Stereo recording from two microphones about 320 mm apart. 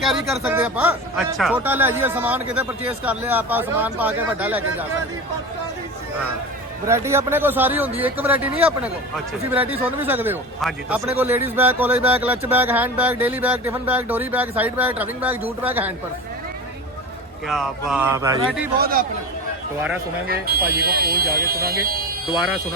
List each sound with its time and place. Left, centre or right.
0.0 s speech: centre
6.8 s speech: centre
17.5 s speech: centre
18.8 s speech: right
20.2 s speech: right